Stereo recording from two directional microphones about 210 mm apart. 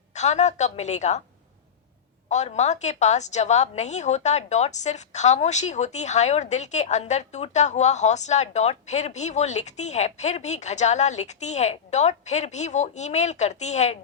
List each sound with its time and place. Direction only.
0.1 s a woman's voice: 35° left (ahead or behind)
2.3 s a woman's voice: 35° left (ahead or behind)